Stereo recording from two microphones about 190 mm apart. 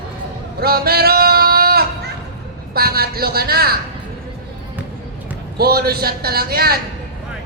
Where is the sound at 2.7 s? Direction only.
55° right (ahead or behind).